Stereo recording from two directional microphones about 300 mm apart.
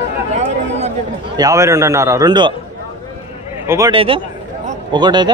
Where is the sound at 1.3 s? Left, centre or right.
Centre.